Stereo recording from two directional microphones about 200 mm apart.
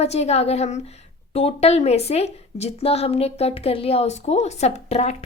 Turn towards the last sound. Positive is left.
turn(degrees=30)  # may be behind; listen again after turning